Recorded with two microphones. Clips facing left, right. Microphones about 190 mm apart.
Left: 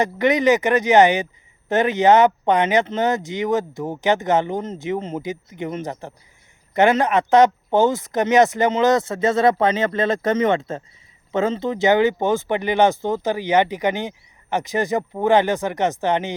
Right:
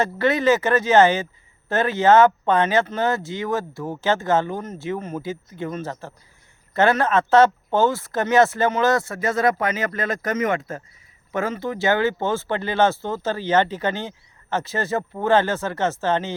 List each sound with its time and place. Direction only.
0.0 s speech: 15° left (ahead or behind)